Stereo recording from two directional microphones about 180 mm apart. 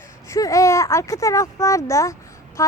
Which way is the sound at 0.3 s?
20° left (ahead or behind).